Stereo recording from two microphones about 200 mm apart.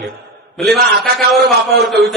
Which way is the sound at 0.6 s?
Centre (ahead or behind).